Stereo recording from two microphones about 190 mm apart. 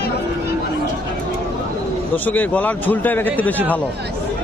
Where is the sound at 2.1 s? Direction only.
10° left (ahead or behind).